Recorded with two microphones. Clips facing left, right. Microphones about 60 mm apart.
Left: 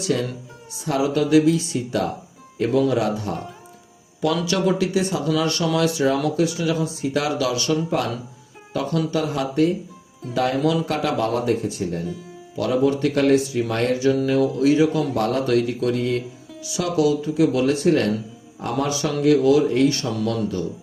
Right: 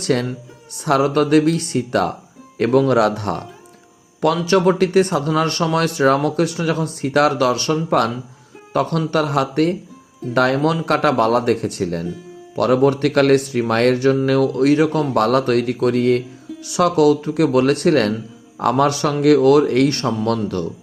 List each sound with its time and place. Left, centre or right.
0.0 s speech: right
4.2 s speech: right
12.5 s speech: right
19.9 s speech: right